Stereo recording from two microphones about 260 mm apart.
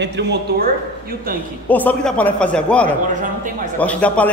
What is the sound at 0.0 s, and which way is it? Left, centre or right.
Speech, right.